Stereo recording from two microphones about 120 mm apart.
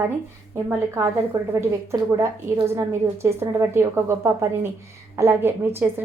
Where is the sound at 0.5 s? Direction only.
20° right (ahead or behind).